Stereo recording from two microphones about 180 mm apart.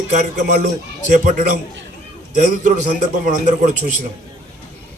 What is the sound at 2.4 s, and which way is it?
A man's voice, 45° right (ahead or behind).